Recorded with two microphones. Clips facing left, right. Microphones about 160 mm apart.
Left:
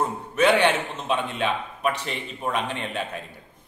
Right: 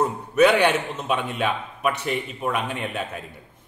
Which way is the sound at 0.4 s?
10° right (ahead or behind).